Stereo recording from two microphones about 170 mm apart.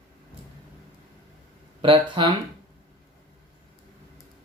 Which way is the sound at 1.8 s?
30° right (ahead or behind).